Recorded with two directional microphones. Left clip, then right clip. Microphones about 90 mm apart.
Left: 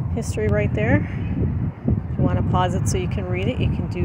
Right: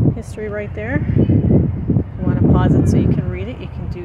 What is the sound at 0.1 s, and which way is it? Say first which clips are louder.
Speech: left 2 dB; 35° left (ahead or behind).